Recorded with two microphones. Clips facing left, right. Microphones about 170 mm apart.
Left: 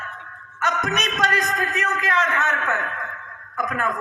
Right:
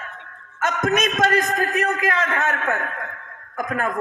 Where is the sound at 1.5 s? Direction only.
35° right (ahead or behind).